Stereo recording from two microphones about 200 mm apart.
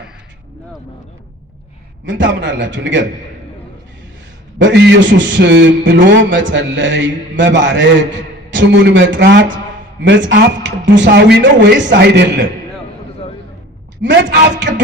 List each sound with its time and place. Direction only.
2.0 s a man's voice: 65° right (ahead or behind)
4.5 s a man's voice: 65° right (ahead or behind)
14.0 s a man's voice: 60° right (ahead or behind)